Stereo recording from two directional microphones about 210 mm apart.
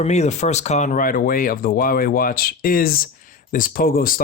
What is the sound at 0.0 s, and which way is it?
Speech, 30° left (ahead or behind).